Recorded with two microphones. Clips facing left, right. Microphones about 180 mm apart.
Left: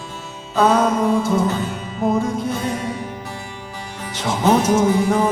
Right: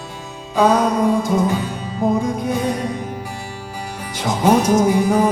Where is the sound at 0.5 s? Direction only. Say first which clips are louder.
Right 1 dB; 15° right (ahead or behind).